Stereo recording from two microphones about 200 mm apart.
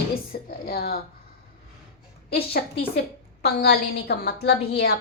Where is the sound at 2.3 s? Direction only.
50° left (ahead or behind).